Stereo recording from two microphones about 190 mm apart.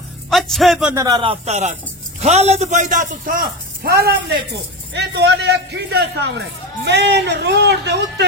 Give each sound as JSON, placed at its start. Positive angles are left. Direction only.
{"t": 0.3, "sound": "a man's voice", "side_deg": 0}
{"t": 0.9, "sound": "a man's voice", "side_deg": -20}